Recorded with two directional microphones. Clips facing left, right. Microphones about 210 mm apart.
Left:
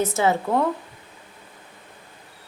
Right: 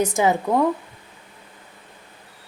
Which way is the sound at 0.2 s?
15° right (ahead or behind).